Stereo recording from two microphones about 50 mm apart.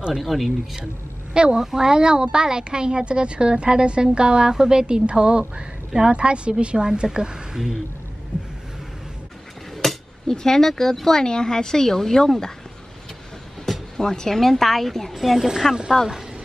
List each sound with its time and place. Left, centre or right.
0.1 s speech: centre
1.3 s a child's voice: centre
9.8 s speech: centre
13.7 s speech: centre